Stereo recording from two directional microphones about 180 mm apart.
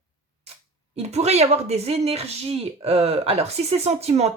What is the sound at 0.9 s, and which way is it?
Speech, 35° right (ahead or behind).